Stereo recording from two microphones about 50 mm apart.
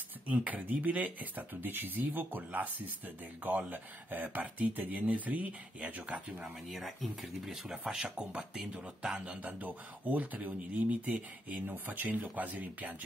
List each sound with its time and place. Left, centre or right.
0.5 s speech: right
6.7 s speech: centre; by 9.5 s right
9.5 s speech: right
11.6 s speech: right